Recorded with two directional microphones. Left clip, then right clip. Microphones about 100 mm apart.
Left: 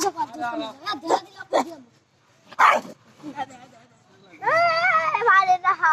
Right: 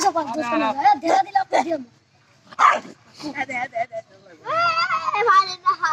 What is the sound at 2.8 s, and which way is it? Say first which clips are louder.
Speech: left 2 dB; 30° right (ahead or behind).